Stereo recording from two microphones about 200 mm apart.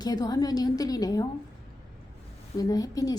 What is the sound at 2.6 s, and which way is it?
Speech, 20° left (ahead or behind).